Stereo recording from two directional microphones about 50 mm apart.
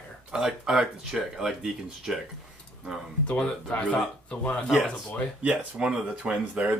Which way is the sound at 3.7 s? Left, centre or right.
Left.